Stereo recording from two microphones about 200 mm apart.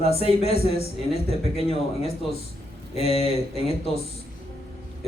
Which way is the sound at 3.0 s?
30° left (ahead or behind).